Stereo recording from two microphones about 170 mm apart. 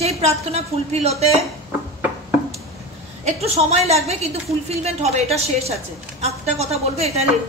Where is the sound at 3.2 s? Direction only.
35° right (ahead or behind).